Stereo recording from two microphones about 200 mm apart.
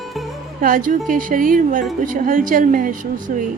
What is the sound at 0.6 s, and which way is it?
A woman's voice, 40° right (ahead or behind).